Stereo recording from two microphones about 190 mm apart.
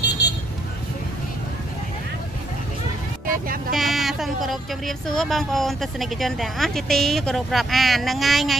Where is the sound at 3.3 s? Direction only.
50° right (ahead or behind).